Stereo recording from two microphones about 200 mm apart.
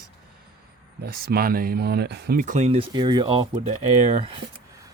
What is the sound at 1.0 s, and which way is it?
Speech, 50° right (ahead or behind).